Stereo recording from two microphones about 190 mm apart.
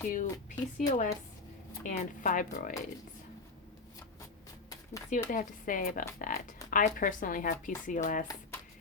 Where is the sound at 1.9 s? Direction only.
40° left (ahead or behind).